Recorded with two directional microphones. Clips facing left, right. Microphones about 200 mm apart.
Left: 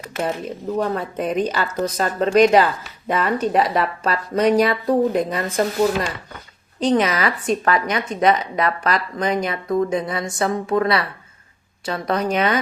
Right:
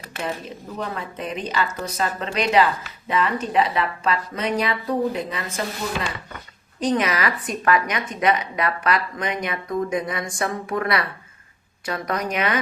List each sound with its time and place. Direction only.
0.9 s a woman's voice: 45° left (ahead or behind)
6.7 s speech: 30° left (ahead or behind)